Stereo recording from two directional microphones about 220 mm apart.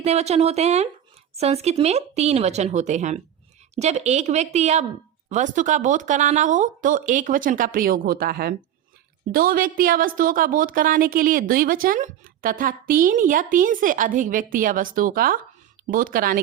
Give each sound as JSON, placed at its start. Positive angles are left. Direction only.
{"t": 0.0, "sound": "a woman's voice", "side_deg": -30}